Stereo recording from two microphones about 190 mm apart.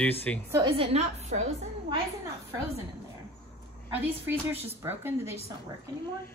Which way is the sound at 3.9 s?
10° right (ahead or behind).